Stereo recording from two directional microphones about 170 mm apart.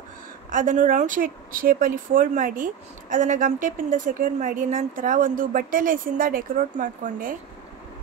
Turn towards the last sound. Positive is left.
turn(degrees=-50)  # may be behind; listen again after turning